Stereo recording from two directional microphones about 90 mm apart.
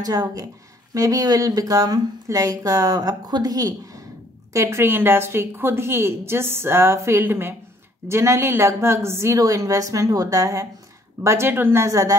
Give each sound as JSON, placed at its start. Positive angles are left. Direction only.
{"t": 0.0, "sound": "speech", "side_deg": -45}
{"t": 4.6, "sound": "a woman's voice", "side_deg": -30}